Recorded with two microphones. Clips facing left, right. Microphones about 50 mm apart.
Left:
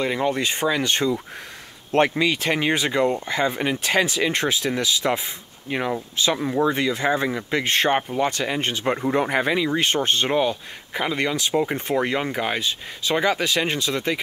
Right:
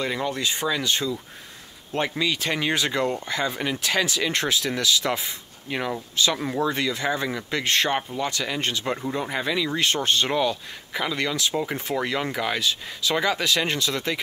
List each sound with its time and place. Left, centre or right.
0.0 s speech: left
0.5 s speech: left
2.1 s speech: left
5.7 s speech: centre
6.1 s speech: left
9.1 s speech: left